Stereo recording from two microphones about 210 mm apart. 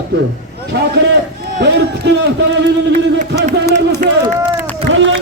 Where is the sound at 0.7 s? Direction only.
50° right (ahead or behind).